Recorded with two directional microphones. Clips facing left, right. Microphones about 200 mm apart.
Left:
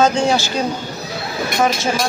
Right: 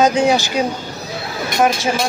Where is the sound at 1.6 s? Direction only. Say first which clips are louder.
Right 2 dB; 5° right (ahead or behind).